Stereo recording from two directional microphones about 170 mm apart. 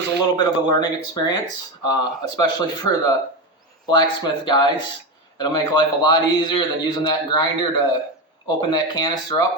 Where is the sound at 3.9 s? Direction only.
25° left (ahead or behind).